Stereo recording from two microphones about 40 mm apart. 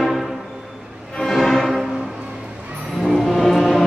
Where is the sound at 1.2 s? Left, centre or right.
Centre.